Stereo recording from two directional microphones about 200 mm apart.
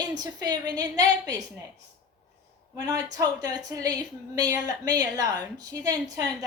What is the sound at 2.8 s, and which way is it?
Speech, 20° right (ahead or behind).